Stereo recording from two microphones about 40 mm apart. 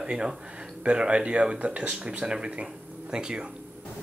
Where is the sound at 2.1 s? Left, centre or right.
Right.